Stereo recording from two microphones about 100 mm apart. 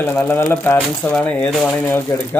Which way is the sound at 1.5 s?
5° left (ahead or behind).